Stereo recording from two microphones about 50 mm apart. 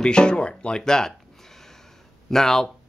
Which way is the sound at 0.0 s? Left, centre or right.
Centre.